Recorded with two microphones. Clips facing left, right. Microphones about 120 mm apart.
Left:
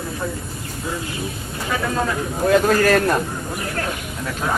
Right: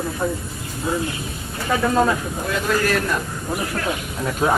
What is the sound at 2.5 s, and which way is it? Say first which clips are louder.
Speech: left 6 dB; 50° left (ahead or behind).